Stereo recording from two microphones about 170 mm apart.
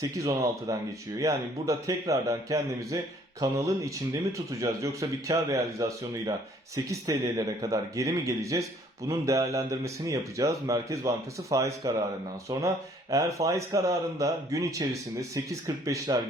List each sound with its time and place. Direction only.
0.0 s a man's voice: 20° right (ahead or behind)